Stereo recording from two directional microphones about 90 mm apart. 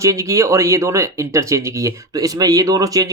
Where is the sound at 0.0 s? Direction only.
35° right (ahead or behind).